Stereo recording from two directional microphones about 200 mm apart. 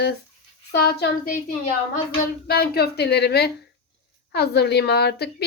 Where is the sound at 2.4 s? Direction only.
50° left (ahead or behind).